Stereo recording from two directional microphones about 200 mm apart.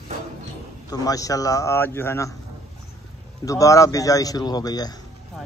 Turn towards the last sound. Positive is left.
turn(degrees=20)  # may be behind; listen again after turning